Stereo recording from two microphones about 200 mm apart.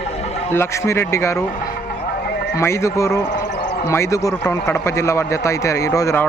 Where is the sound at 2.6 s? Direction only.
15° left (ahead or behind).